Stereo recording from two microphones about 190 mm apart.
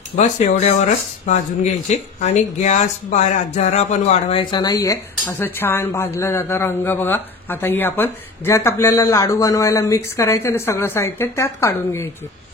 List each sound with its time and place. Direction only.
0.1 s speech: 40° left (ahead or behind); by 12.1 s 15° left (ahead or behind)